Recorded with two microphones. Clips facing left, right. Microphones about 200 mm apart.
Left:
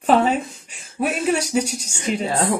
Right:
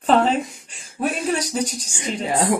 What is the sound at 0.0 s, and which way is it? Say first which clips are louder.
Speech: even; 10° left (ahead or behind).